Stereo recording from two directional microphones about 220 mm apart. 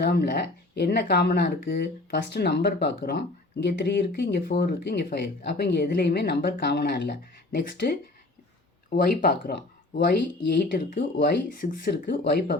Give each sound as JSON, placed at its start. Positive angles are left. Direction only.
{"t": 0.0, "sound": "speech", "side_deg": 45}
{"t": 8.9, "sound": "speech", "side_deg": 40}